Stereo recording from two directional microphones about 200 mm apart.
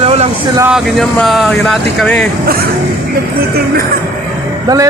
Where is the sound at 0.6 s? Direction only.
Centre (ahead or behind).